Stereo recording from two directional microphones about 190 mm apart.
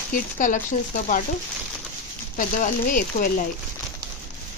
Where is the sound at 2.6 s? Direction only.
45° left (ahead or behind).